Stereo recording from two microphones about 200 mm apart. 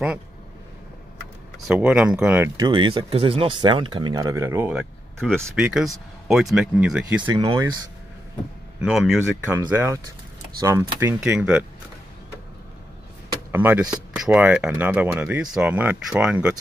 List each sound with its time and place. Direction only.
1.7 s speech: 5° right (ahead or behind)
2.7 s speech: 25° right (ahead or behind); by 7.2 s 5° right (ahead or behind)
7.2 s speech: 20° right (ahead or behind)
8.8 s speech: centre (ahead or behind)
13.5 s speech: 10° right (ahead or behind)